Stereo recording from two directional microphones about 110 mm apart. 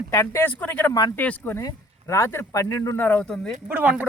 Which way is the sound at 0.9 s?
35° left (ahead or behind).